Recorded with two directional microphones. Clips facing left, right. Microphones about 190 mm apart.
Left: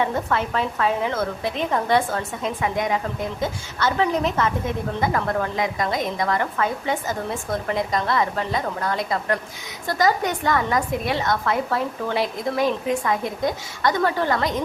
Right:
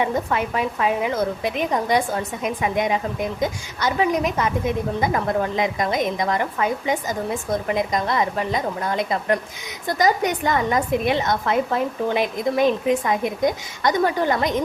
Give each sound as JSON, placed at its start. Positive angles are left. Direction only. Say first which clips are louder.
{"t": 0.0, "sound": "a woman's voice", "louder": "right 1 dB", "side_deg": -15}